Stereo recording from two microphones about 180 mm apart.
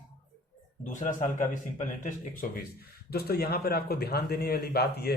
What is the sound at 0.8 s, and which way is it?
Speech, 45° left (ahead or behind).